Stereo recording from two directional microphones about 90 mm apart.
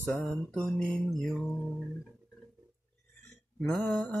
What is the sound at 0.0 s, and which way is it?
Mantra, 15° left (ahead or behind).